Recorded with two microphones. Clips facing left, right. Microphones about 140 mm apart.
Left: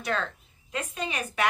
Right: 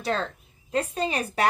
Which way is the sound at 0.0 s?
30° right (ahead or behind).